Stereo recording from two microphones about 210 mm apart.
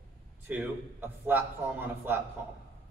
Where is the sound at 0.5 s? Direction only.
10° right (ahead or behind).